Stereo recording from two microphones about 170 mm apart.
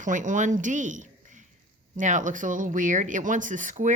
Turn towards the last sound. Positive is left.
turn(degrees=-45)  # may be behind; listen again after turning